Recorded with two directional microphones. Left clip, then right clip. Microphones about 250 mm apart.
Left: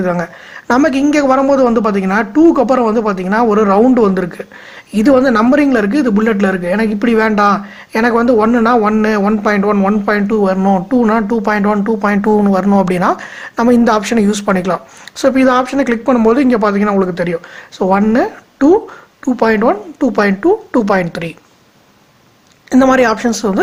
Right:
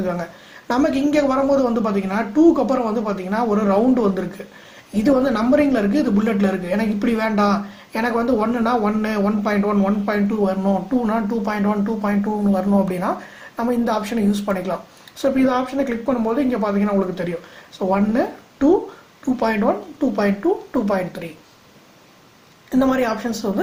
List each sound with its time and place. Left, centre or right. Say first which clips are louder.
0.0 s a man's voice: left 8 dB; left
22.7 s a man's voice: left 9 dB; left